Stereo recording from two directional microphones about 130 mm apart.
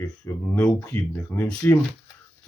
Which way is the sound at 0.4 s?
15° left (ahead or behind).